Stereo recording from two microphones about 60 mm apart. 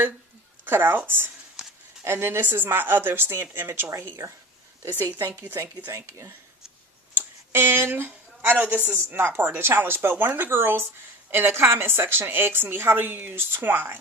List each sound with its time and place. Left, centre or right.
0.6 s a woman's voice: right
5.4 s a woman's voice: right
7.5 s a woman's voice: right